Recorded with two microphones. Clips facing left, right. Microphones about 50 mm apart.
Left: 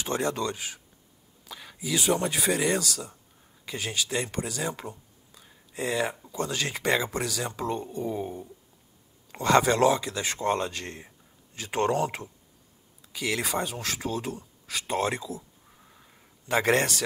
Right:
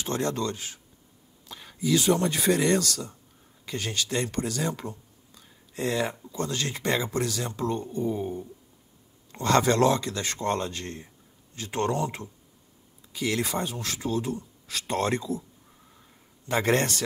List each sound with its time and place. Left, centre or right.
0.0 s speech: centre
1.5 s speech: centre
13.1 s speech: centre
14.7 s a sound: centre